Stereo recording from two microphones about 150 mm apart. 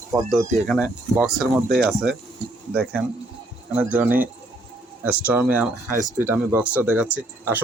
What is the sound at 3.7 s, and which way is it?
Speech, 10° right (ahead or behind).